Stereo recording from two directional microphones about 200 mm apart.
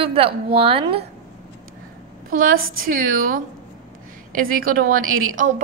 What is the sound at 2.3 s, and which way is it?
A woman's voice, 45° right (ahead or behind).